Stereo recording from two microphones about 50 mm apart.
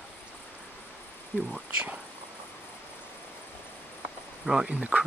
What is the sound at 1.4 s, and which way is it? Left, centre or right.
Speech, right.